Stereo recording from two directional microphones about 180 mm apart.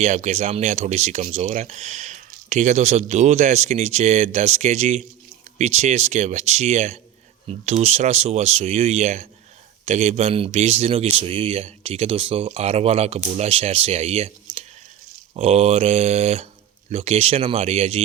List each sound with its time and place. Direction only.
0.0 s speech: 40° right (ahead or behind)
15.4 s speech: 35° right (ahead or behind)